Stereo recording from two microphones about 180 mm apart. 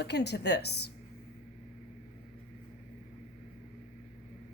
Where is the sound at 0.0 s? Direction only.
65° left (ahead or behind).